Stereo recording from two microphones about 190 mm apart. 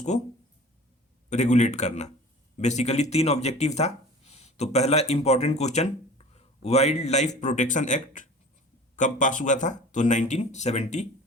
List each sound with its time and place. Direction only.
1.3 s speech: 40° left (ahead or behind)